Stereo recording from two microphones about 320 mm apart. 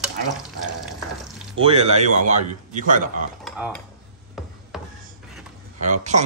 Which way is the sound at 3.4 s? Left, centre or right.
Centre.